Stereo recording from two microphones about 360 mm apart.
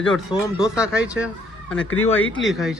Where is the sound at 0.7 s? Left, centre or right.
Centre.